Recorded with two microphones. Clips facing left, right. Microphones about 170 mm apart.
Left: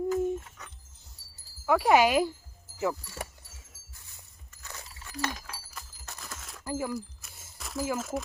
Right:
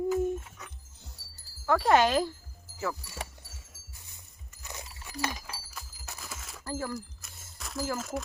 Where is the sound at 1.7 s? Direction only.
10° left (ahead or behind).